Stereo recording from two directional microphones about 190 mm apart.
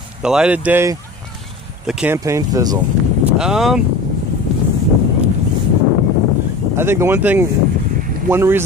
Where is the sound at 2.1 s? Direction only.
15° right (ahead or behind).